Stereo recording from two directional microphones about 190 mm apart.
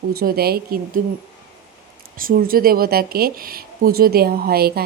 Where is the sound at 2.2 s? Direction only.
50° right (ahead or behind).